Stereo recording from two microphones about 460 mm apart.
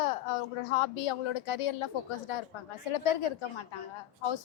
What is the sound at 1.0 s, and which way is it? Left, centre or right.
Speech, left.